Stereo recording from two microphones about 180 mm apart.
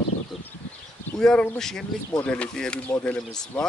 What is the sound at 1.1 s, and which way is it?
Speech, 5° left (ahead or behind).